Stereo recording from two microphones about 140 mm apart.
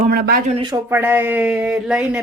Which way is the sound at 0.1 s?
90° right.